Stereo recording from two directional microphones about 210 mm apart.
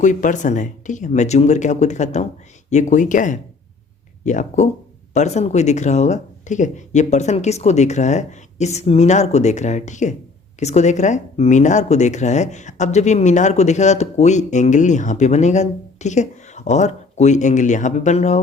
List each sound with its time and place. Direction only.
0.0 s speech: 35° left (ahead or behind)